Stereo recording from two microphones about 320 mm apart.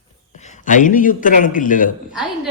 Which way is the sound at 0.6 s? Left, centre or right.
Left.